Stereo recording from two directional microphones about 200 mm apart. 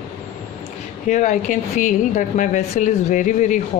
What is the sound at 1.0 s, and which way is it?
A woman's voice, 40° left (ahead or behind).